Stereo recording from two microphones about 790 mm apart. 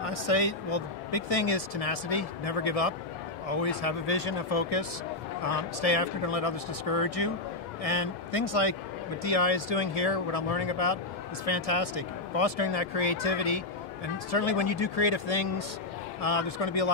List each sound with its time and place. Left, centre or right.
0.0 s speech: left